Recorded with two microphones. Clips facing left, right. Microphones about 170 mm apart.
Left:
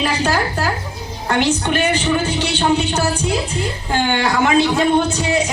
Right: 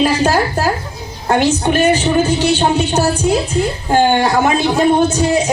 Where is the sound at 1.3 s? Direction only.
45° right (ahead or behind).